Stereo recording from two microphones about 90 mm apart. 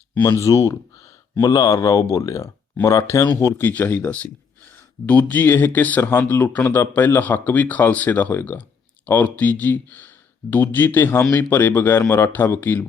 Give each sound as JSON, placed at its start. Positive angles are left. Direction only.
{"t": 0.1, "sound": "speech", "side_deg": 30}
{"t": 3.6, "sound": "speech", "side_deg": 20}